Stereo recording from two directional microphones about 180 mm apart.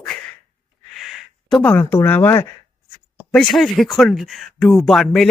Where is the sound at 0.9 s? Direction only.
Centre (ahead or behind).